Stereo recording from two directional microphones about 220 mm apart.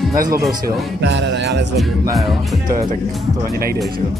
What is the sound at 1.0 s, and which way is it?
Speech, 55° right (ahead or behind).